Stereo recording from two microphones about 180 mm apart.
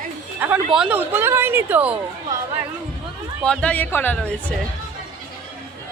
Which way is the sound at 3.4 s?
5° left (ahead or behind).